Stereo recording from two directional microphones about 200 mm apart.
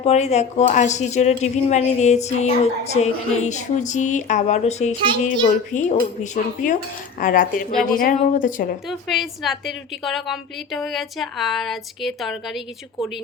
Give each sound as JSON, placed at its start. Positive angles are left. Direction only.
{"t": 0.0, "sound": "speech", "side_deg": 35}
{"t": 8.9, "sound": "a woman's voice", "side_deg": 0}